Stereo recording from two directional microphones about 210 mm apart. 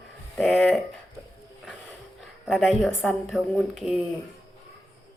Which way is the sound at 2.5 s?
Centre (ahead or behind).